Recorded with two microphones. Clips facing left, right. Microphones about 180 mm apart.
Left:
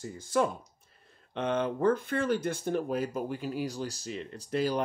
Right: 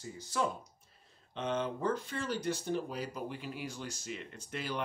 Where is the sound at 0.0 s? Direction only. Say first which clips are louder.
Left 6 dB; 50° left (ahead or behind).